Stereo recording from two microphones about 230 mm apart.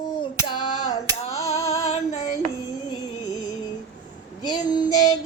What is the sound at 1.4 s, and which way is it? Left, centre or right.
Female singing, left.